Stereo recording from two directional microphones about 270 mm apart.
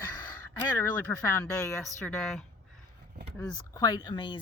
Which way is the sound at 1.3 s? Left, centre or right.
Centre.